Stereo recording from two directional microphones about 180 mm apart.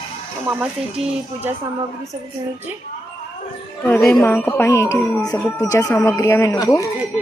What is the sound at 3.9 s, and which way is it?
Speech, 5° left (ahead or behind).